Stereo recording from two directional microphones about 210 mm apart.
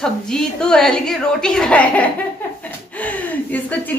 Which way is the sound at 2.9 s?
5° left (ahead or behind).